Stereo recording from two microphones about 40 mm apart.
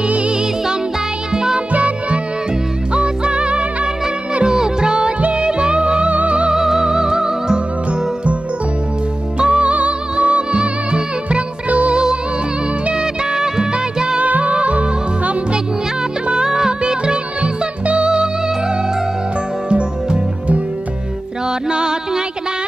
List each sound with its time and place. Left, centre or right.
0.0 s music: right
1.3 s music: centre
1.7 s music: right
4.6 s music: centre
6.5 s music: centre
9.4 s music: right
12.9 s music: centre
14.1 s music: right
16.4 s music: centre
19.7 s music: right